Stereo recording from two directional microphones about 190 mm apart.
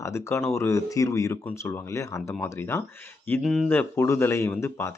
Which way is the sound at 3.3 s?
Centre (ahead or behind).